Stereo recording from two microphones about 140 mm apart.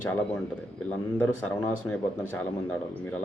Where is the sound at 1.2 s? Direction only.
10° left (ahead or behind).